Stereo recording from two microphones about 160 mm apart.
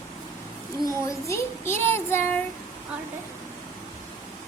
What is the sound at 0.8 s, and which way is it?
Child singing, 20° left (ahead or behind).